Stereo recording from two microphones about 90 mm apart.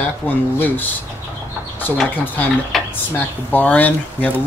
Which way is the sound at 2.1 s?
20° left (ahead or behind).